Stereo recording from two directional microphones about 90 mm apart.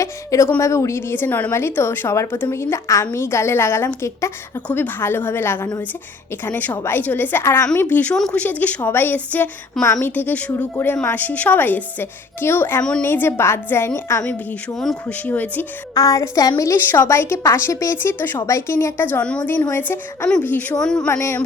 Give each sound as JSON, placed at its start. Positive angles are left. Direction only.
{"t": 0.0, "sound": "a sound", "side_deg": 35}
{"t": 0.6, "sound": "a woman's voice", "side_deg": 30}
{"t": 4.7, "sound": "a woman's voice", "side_deg": 20}
{"t": 8.1, "sound": "a woman's voice", "side_deg": 10}
{"t": 16.0, "sound": "a woman's voice", "side_deg": 35}
{"t": 16.7, "sound": "a woman's voice", "side_deg": 25}
{"t": 20.7, "sound": "speech", "side_deg": 10}
{"t": 21.1, "sound": "a woman's voice", "side_deg": 30}